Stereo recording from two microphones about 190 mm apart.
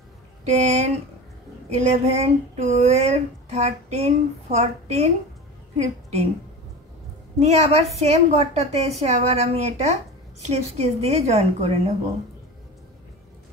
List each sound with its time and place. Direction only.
0.5 s speech: 35° right (ahead or behind)
7.3 s speech: 35° right (ahead or behind)